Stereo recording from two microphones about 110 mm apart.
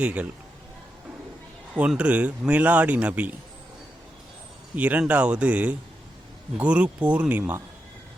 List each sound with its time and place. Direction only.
0.0 s a man's voice: 10° right (ahead or behind)
1.7 s a man's voice: 10° right (ahead or behind)
4.7 s a man's voice: 15° right (ahead or behind)